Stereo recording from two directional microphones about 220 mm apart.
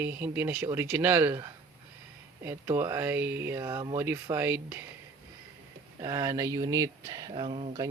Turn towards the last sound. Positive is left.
turn(degrees=-25)  # may be behind; listen again after turning